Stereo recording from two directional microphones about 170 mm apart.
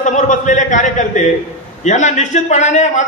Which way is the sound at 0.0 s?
45° left (ahead or behind).